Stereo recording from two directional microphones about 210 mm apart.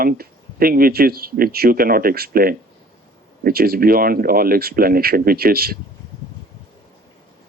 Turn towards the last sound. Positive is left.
turn(degrees=-45)  # may be behind; listen again after turning